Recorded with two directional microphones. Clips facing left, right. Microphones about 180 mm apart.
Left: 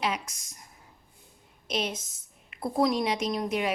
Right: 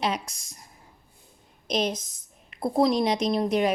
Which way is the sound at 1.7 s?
35° right (ahead or behind).